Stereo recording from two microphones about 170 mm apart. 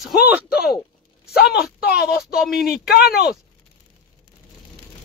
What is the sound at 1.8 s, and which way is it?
Speech, 65° left (ahead or behind).